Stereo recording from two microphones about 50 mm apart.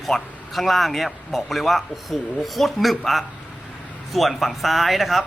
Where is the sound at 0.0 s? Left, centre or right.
Centre.